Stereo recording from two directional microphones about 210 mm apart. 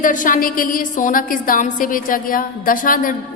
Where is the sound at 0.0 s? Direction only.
40° left (ahead or behind).